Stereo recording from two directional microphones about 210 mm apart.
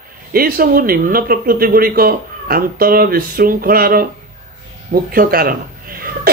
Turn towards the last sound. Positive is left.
turn(degrees=-45)  # may be behind; listen again after turning